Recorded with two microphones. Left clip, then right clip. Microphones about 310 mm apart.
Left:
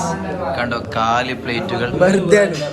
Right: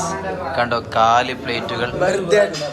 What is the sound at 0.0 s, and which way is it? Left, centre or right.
A man's voice, centre.